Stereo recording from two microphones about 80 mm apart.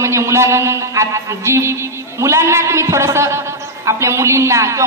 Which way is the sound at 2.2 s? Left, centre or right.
Right.